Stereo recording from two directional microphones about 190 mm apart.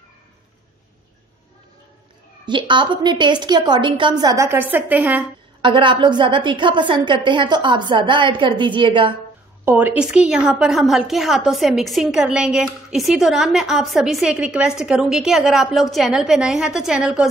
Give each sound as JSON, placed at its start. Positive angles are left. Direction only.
{"t": 2.4, "sound": "a woman's voice", "side_deg": -25}
{"t": 5.6, "sound": "a woman's voice", "side_deg": -25}
{"t": 9.7, "sound": "a woman's voice", "side_deg": -10}